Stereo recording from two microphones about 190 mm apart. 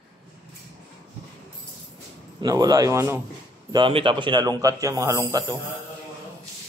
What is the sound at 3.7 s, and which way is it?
A man's voice, 25° right (ahead or behind).